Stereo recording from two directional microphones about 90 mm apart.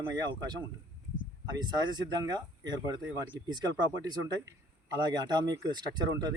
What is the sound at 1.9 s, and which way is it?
Speech, 50° right (ahead or behind).